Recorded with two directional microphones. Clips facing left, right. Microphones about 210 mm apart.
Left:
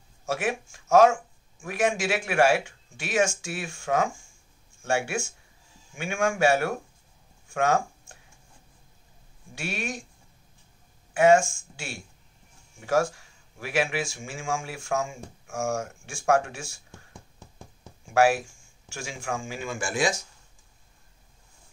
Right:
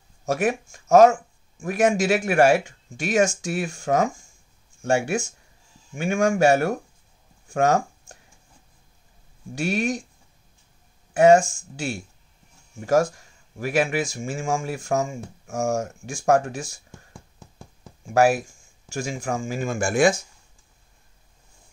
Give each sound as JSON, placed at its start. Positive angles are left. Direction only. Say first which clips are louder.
{"t": 0.2, "sound": "speech", "louder": "right 5 dB", "side_deg": -40}
{"t": 7.4, "sound": "a sound", "louder": "right 4 dB", "side_deg": -40}
{"t": 9.6, "sound": "speech", "louder": "right 9 dB", "side_deg": -40}
{"t": 11.1, "sound": "speech", "louder": "right 4 dB", "side_deg": -35}
{"t": 18.1, "sound": "speech", "louder": "right 3 dB", "side_deg": -40}